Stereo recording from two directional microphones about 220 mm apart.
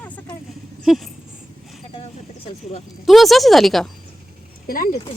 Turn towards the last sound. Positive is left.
turn(degrees=40)  # may be behind; listen again after turning